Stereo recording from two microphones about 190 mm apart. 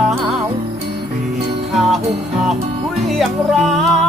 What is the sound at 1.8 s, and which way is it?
Music, centre (ahead or behind).